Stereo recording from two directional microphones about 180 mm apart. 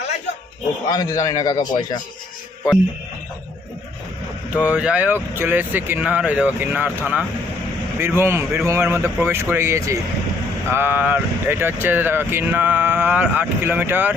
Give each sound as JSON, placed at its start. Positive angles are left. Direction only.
{"t": 0.9, "sound": "a man's voice", "side_deg": 20}
{"t": 4.5, "sound": "speech", "side_deg": -5}